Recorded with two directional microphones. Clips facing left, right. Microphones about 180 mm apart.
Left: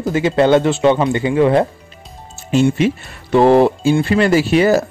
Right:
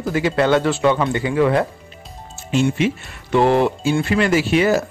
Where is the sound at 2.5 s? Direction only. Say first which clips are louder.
Left 4 dB; 40° left (ahead or behind).